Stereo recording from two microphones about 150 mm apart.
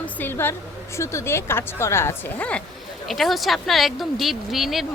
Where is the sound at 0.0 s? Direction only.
15° left (ahead or behind).